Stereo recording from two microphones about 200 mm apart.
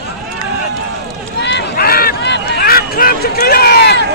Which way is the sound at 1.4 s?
60° left (ahead or behind).